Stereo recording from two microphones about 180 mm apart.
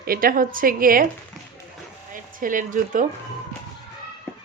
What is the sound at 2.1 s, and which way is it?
Speech, 50° right (ahead or behind).